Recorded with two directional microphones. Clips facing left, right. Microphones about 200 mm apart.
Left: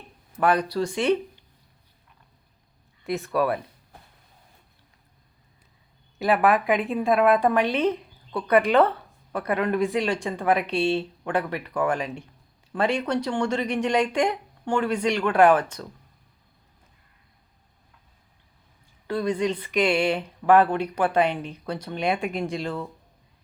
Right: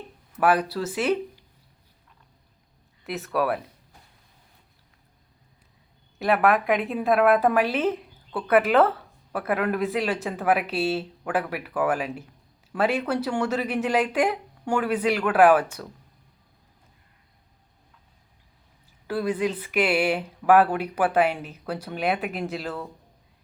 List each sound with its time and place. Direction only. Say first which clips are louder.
0.3 s a woman's voice: even; 5° right (ahead or behind)
3.0 s a woman's voice: left 2 dB; centre (ahead or behind)
6.1 s a woman's voice: even; centre (ahead or behind)
19.0 s speech: left 1 dB; 5° right (ahead or behind)